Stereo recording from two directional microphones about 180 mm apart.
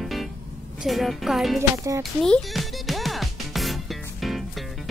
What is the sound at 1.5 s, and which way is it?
Speech, 15° right (ahead or behind).